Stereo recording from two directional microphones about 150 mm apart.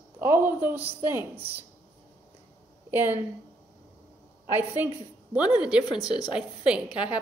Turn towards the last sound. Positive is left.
turn(degrees=-10)  # may be behind; listen again after turning